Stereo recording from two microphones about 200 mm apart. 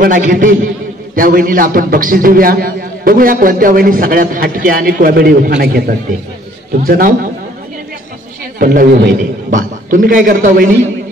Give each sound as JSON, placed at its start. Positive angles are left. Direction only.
{"t": 0.3, "sound": "a man's voice", "side_deg": -45}
{"t": 8.5, "sound": "a man's voice", "side_deg": -45}